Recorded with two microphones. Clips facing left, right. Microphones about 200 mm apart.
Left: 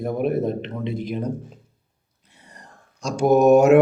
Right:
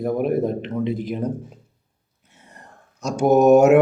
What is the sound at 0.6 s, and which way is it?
Speech, 50° right (ahead or behind).